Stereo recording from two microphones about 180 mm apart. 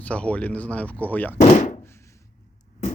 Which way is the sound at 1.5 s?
40° left (ahead or behind).